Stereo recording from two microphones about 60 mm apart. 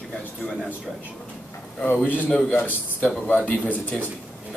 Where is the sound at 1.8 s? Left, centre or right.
Left.